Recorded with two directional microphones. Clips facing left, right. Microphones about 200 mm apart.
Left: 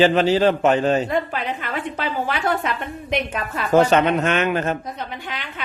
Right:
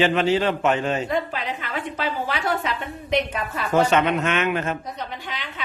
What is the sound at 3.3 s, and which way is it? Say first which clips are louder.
A man's voice: left 4 dB; 45° left (ahead or behind).